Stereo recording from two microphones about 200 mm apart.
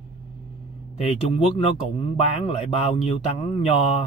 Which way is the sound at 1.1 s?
30° left (ahead or behind).